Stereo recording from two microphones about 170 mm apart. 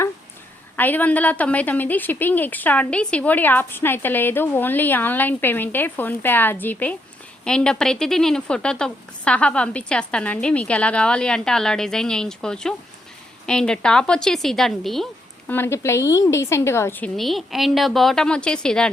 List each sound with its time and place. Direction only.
0.8 s a woman's voice: 10° left (ahead or behind)
15.4 s a woman's voice: 15° left (ahead or behind)
17.2 s speech: centre (ahead or behind)